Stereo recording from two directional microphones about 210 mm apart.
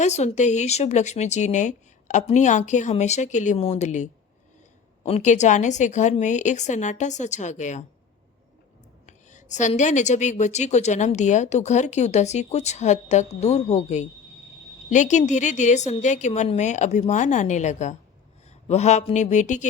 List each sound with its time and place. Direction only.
0.0 s speech: 30° left (ahead or behind)
9.0 s speech: 35° left (ahead or behind)